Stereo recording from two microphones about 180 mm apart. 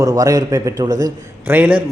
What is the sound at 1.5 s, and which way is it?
Speech, 10° right (ahead or behind).